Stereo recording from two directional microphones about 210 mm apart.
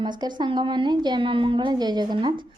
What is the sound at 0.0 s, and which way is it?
Speech, 20° right (ahead or behind).